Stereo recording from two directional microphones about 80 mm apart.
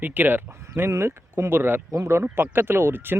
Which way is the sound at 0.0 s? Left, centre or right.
Right.